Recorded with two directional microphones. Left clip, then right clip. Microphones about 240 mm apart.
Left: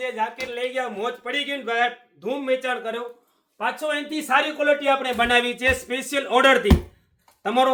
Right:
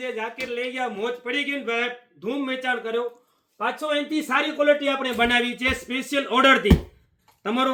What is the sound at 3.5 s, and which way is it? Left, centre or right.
Speech, left.